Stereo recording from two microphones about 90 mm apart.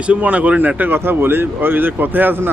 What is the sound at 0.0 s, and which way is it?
Speech, 15° right (ahead or behind).